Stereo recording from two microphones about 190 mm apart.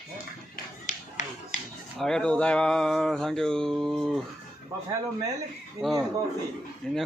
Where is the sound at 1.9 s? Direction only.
5° left (ahead or behind).